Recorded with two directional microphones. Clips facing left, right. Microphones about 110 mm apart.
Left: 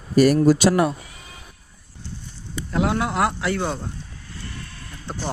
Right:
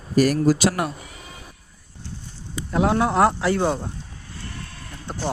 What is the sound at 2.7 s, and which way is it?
Speech, 25° right (ahead or behind).